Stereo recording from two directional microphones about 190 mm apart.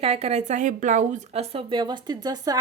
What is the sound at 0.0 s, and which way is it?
Speech, 35° right (ahead or behind).